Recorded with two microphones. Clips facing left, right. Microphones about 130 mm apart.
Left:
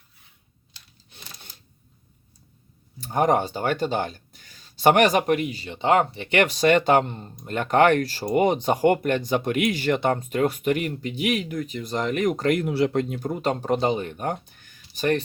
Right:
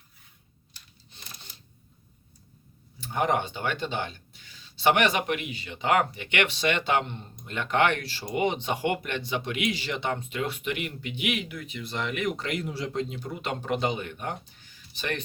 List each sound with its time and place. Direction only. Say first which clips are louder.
3.0 s speech: left 5 dB; 40° left (ahead or behind); by 14.8 s 55° left (ahead or behind)
14.9 s speech: left 10 dB; 40° left (ahead or behind)